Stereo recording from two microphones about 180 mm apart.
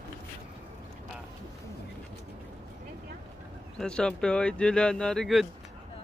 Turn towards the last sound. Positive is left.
turn(degrees=0)  # may be behind; listen again after turning